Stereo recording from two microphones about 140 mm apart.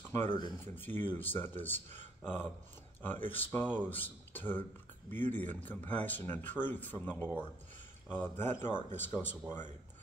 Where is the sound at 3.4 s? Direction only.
15° left (ahead or behind).